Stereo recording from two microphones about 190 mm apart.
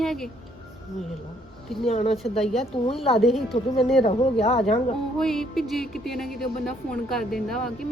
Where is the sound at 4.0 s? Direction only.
30° left (ahead or behind).